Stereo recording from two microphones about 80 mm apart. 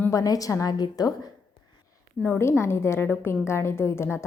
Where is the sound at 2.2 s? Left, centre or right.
Left.